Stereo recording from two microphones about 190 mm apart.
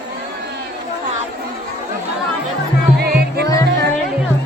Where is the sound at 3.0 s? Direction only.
55° right (ahead or behind).